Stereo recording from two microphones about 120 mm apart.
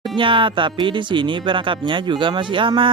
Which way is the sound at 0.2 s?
45° right (ahead or behind).